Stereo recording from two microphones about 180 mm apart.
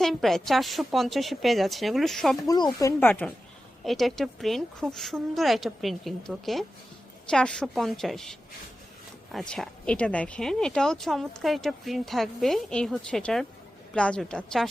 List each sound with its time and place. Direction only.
0.0 s speech: centre (ahead or behind)
2.5 s speech: 20° left (ahead or behind); by 14.7 s 5° left (ahead or behind)